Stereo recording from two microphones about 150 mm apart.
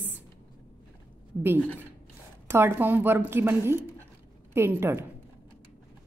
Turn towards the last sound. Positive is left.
turn(degrees=-15)  # may be behind; listen again after turning